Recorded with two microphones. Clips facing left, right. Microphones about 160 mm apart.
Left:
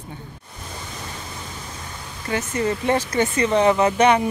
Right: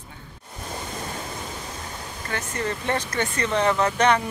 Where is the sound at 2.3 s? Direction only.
10° left (ahead or behind).